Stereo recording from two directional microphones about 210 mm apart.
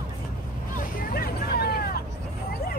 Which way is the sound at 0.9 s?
45° left (ahead or behind).